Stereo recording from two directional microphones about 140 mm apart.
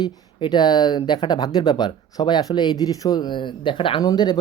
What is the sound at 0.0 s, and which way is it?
Speech, 30° left (ahead or behind).